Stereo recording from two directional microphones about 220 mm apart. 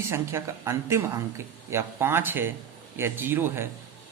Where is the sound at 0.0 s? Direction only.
10° right (ahead or behind).